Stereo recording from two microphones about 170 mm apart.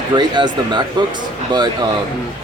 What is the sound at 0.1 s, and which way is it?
Speech, 25° right (ahead or behind).